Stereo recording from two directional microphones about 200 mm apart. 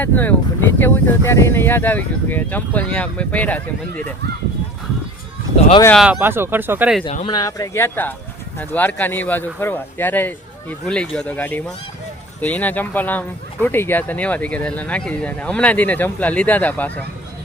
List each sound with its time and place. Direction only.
0.0 s speech: 10° left (ahead or behind)
6.0 s speech: 10° right (ahead or behind)
7.0 s speech: 30° left (ahead or behind)
7.3 s speech: 15° left (ahead or behind)